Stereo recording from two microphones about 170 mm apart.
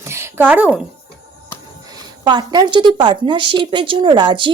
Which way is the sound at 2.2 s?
25° right (ahead or behind).